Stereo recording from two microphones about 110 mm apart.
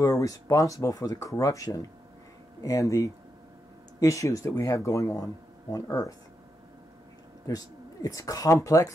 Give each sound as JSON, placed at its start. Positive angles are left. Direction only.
{"t": 0.0, "sound": "speech", "side_deg": 30}
{"t": 7.4, "sound": "speech", "side_deg": 35}